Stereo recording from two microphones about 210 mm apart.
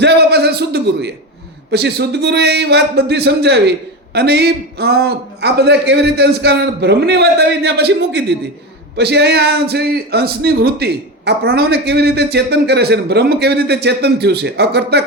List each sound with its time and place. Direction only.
0.0 s a man's voice: 50° right (ahead or behind)